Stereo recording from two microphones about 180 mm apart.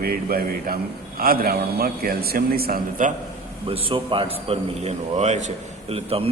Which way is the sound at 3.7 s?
30° right (ahead or behind).